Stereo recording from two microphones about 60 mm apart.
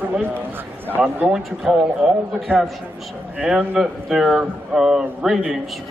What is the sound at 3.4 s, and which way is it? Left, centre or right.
A man's voice, centre.